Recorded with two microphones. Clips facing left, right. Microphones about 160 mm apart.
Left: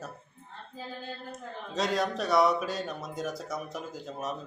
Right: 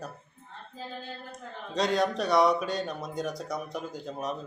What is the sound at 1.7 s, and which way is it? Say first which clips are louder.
Speech: right 3 dB; centre (ahead or behind).